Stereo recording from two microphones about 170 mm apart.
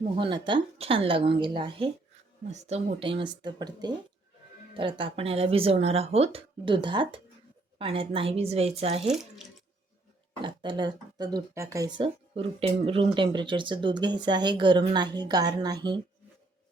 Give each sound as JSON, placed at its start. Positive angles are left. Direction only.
{"t": 0.2, "sound": "speech", "side_deg": -30}
{"t": 2.5, "sound": "speech", "side_deg": -40}
{"t": 10.4, "sound": "speech", "side_deg": -30}